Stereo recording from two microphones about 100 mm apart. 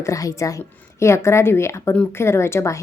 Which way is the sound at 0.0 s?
35° left (ahead or behind).